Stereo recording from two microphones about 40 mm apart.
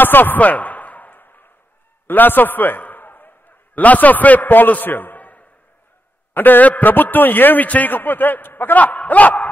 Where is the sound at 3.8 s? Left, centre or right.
Left.